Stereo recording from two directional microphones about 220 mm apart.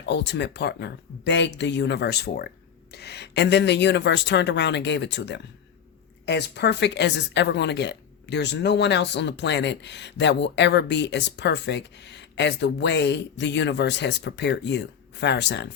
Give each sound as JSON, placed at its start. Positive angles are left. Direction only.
{"t": 0.0, "sound": "speech", "side_deg": 50}